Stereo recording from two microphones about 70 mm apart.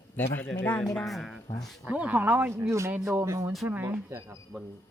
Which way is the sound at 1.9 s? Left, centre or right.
Right.